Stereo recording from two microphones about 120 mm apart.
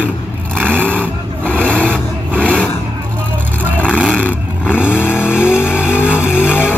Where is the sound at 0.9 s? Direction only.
15° right (ahead or behind).